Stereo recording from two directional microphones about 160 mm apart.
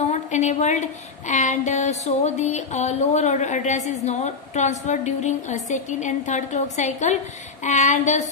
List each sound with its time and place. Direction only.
0.0 s a woman's voice: 45° left (ahead or behind)